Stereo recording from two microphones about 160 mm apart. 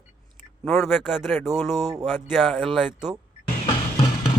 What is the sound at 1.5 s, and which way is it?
Speech, 20° right (ahead or behind).